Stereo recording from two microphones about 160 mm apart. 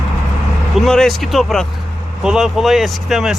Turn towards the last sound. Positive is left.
turn(degrees=0)  # may be behind; listen again after turning